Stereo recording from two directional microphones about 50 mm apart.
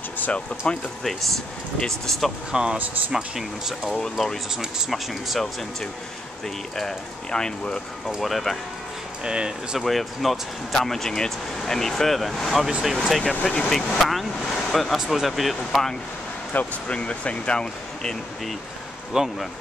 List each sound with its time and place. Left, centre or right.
0.7 s speech: centre
1.8 s speech: centre
2.5 s speech: centre
3.9 s speech: centre
4.6 s speech: centre
6.8 s speech: centre
8.2 s speech: centre
9.2 s speech: centre
9.8 s speech: centre
13.3 s speech: centre
16.8 s speech: left
19.1 s speech: centre